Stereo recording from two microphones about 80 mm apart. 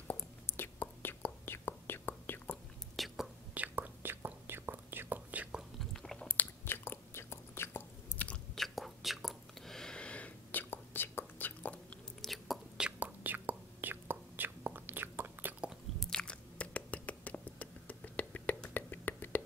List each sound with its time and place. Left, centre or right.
0.1 s whispering: left
3.0 s whispering: centre
3.5 s whispering: right
5.6 s chewing: centre
6.2 s chewing: left
8.5 s whispering: centre
12.2 s chewing: centre
12.8 s whispering: centre
16.0 s chewing: centre; by 19.4 s left